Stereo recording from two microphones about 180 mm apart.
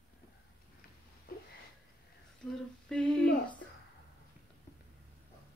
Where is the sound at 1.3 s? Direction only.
55° left (ahead or behind).